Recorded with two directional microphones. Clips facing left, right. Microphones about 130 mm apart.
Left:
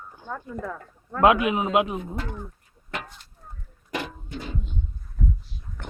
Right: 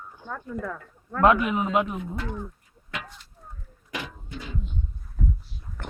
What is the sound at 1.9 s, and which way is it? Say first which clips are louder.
Speech: left 1 dB; 40° left (ahead or behind).